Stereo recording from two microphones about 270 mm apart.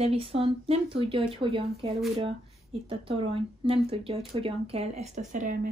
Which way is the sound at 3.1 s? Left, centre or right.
Right.